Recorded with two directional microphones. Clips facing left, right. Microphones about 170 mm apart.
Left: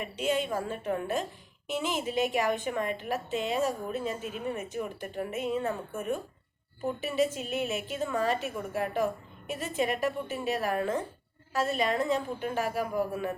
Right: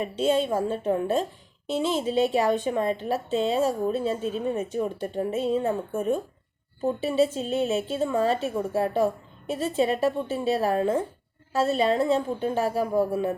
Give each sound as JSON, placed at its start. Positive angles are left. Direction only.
{"t": 0.4, "sound": "a woman's voice", "side_deg": -25}